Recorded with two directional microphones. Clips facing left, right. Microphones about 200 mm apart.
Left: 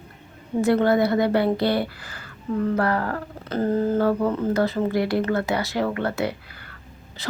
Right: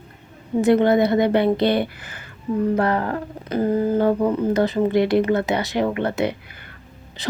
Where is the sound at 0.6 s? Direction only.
20° right (ahead or behind).